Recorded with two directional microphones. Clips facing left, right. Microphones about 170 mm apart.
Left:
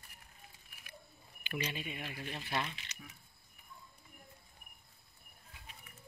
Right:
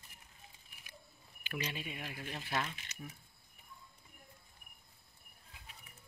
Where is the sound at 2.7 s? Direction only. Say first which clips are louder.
Even; 45° right (ahead or behind).